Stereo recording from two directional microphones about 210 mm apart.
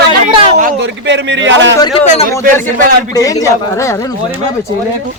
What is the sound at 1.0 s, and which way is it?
Speech, 60° right (ahead or behind).